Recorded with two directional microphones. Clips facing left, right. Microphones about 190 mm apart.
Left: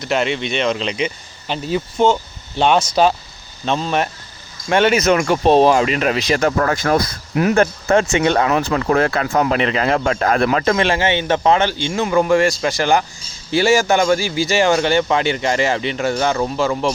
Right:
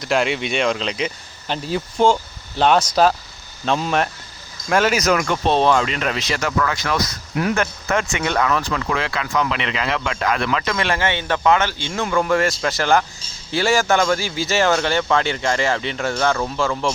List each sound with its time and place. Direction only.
0.0 s speech: centre (ahead or behind)
3.7 s speech: 10° right (ahead or behind)
5.1 s speech: 25° left (ahead or behind)
5.5 s speech: 10° left (ahead or behind)
6.4 s speech: 45° left (ahead or behind)
7.3 s speech: 25° left (ahead or behind); by 10.8 s 40° left (ahead or behind)
10.8 s speech: 20° left (ahead or behind)
12.0 s speech: 10° left (ahead or behind)
13.5 s speech: centre (ahead or behind)
14.6 s speech: 15° left (ahead or behind)